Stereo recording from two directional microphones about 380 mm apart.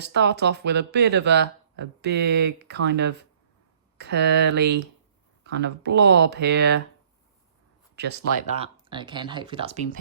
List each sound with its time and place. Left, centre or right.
0.0 s speech: right
7.9 s speech: right
8.5 s speech: centre